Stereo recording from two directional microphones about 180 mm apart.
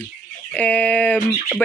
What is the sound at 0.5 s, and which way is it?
Bird, 10° left (ahead or behind).